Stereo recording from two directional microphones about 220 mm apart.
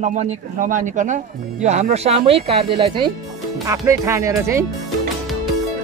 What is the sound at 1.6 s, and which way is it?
Speech, 30° right (ahead or behind).